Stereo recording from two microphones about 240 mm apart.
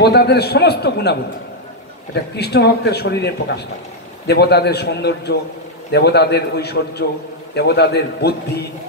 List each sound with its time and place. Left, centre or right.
0.0 s a man's voice: left
2.3 s a man's voice: left